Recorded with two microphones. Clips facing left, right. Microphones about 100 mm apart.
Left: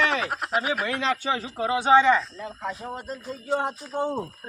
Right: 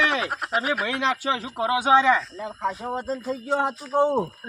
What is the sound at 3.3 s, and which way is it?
Speech, 80° right.